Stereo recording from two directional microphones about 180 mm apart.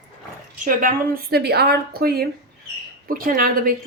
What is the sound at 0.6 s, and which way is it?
A woman's voice, 50° right (ahead or behind).